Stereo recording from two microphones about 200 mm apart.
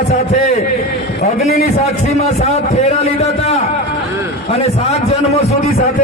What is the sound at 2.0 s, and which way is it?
Speech, 35° left (ahead or behind).